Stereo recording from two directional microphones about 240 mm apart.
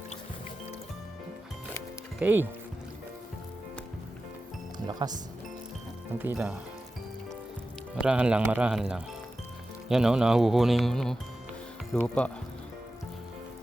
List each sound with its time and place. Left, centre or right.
2.1 s speech: centre
4.9 s speech: centre
6.1 s speech: centre
8.0 s speech: centre